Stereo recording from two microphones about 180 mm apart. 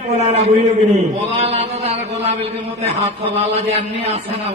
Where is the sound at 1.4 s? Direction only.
35° right (ahead or behind).